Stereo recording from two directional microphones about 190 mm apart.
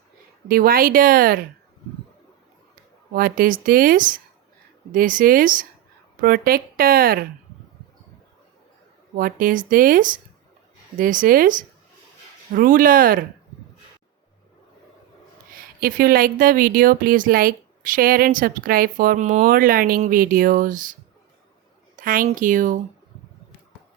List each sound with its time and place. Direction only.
0.4 s speech: 50° right (ahead or behind)
3.1 s speech: 50° right (ahead or behind)
9.1 s speech: 50° right (ahead or behind)
15.5 s speech: 50° right (ahead or behind)
21.9 s speech: 45° right (ahead or behind)